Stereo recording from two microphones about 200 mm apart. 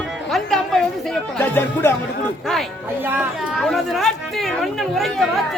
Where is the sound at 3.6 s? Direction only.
Centre (ahead or behind).